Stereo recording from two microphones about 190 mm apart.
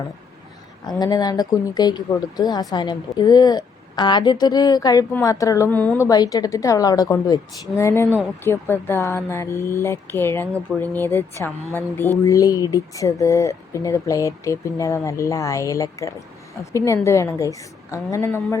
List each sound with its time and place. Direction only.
0.9 s a woman's voice: 20° left (ahead or behind)
6.1 s a woman's voice: 20° left (ahead or behind)